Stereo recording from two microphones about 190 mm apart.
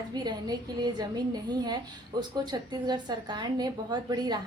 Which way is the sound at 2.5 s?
20° right (ahead or behind).